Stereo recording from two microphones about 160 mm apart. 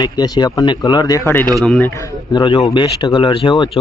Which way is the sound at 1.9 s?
25° left (ahead or behind).